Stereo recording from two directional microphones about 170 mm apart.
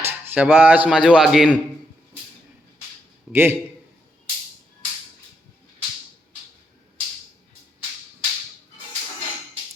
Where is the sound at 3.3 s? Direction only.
15° right (ahead or behind).